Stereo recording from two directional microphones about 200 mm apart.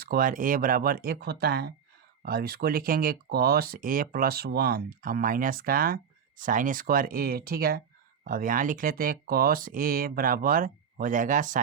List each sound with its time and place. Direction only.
0.0 s speech: 45° right (ahead or behind)